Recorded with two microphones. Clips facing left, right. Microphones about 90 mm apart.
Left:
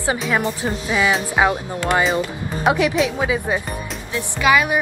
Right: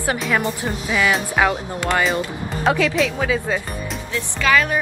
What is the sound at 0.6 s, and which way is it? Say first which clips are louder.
Speech: left 1 dB; 15° left (ahead or behind).